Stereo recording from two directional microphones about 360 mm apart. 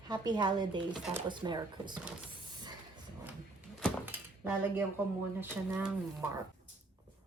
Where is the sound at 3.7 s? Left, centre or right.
Centre.